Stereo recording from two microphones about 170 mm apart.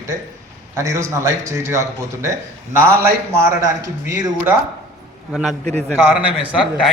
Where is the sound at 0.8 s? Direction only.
15° right (ahead or behind).